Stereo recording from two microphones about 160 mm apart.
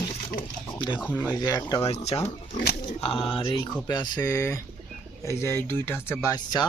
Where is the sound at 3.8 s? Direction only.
25° left (ahead or behind).